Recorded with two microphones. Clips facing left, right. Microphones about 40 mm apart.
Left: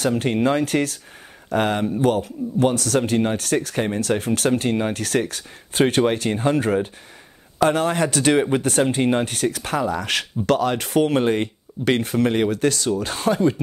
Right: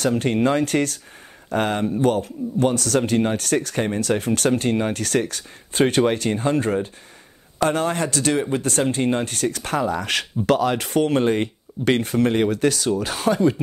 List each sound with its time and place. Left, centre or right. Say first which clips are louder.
0.0 s a man's voice: even; centre
8.2 s speech: left 5 dB; left
8.6 s a man's voice: left 2 dB; centre